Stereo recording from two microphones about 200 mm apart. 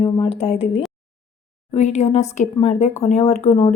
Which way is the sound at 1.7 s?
35° left (ahead or behind).